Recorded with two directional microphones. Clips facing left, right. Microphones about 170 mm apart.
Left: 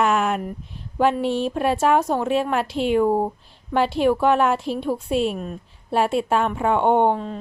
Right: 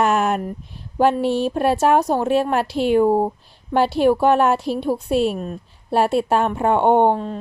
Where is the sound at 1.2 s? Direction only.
5° right (ahead or behind).